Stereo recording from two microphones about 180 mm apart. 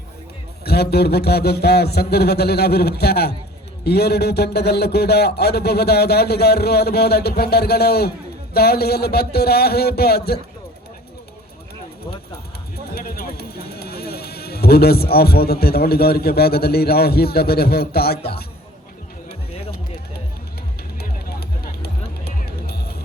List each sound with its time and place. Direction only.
0.6 s a man's voice: 60° left (ahead or behind)
12.9 s speech: 55° left (ahead or behind)
19.5 s music: 35° left (ahead or behind)
21.8 s music: 60° left (ahead or behind)